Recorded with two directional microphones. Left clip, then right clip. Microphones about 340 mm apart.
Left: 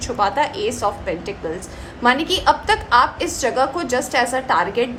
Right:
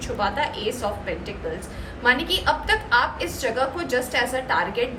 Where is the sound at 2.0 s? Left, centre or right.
Centre.